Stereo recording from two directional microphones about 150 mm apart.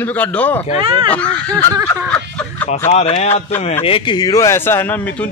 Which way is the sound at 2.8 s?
45° left (ahead or behind).